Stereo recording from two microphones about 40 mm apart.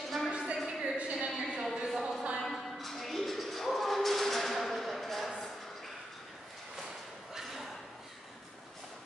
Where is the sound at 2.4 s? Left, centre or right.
Centre.